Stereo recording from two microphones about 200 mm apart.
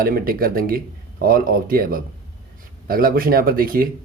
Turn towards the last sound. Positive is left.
turn(degrees=-45)  # may be behind; listen again after turning